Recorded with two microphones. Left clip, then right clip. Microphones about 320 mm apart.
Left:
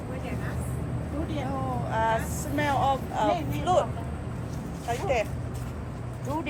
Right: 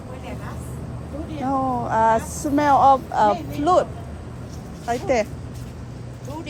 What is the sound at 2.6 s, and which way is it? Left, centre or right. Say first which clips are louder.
Speech: right 11 dB; right.